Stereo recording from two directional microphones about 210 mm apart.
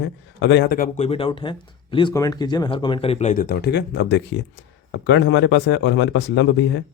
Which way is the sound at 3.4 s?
50° left (ahead or behind).